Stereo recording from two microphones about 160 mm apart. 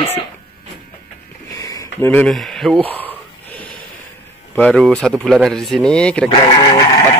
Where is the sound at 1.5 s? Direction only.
20° left (ahead or behind).